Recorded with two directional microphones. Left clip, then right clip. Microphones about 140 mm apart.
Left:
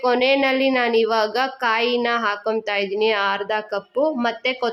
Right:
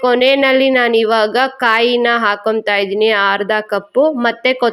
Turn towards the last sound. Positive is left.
turn(degrees=-35)  # may be behind; listen again after turning